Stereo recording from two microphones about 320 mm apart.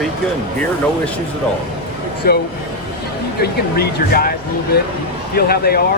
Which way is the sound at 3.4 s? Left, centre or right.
Left.